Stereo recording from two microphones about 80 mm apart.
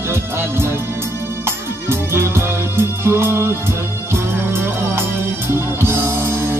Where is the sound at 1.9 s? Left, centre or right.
Right.